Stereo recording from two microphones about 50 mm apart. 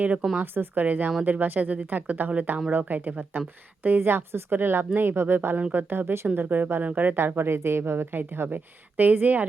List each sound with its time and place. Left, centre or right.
0.0 s speech: right
0.3 s a woman's voice: right
7.3 s a woman's voice: right